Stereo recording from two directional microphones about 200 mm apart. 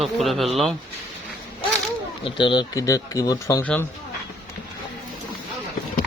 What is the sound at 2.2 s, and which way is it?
Speech, 25° left (ahead or behind).